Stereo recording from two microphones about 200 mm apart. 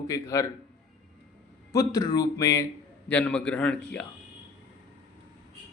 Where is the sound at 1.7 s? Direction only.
15° left (ahead or behind).